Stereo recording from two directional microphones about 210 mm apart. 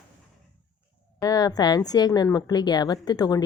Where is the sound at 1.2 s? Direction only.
15° left (ahead or behind).